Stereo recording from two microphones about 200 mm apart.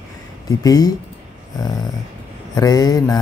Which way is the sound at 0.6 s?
20° left (ahead or behind).